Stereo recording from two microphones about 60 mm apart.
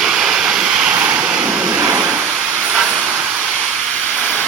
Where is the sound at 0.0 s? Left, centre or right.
Centre.